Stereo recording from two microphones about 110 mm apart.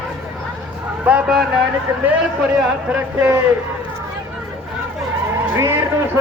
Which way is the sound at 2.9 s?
20° right (ahead or behind).